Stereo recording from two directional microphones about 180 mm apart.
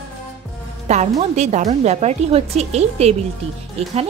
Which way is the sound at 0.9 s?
40° right (ahead or behind).